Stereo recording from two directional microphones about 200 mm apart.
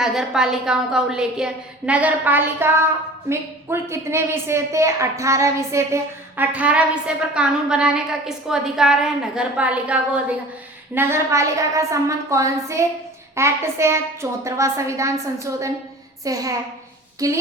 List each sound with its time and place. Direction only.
0.0 s a woman's voice: centre (ahead or behind)